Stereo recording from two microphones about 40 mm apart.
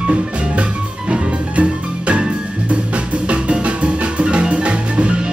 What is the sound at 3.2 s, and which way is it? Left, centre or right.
Music, right.